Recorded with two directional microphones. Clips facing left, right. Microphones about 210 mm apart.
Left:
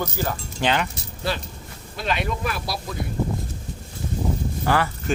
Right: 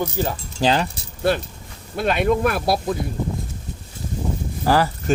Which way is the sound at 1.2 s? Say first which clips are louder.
Right 7 dB; 55° right (ahead or behind).